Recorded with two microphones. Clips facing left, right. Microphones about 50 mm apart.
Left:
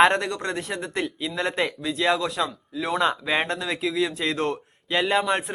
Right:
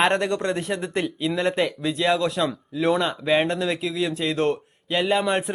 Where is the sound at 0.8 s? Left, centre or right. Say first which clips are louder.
Right 3 dB; centre.